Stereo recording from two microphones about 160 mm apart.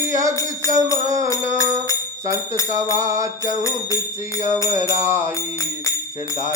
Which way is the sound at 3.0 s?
20° right (ahead or behind).